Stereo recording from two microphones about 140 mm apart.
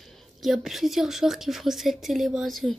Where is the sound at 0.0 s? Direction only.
Centre (ahead or behind).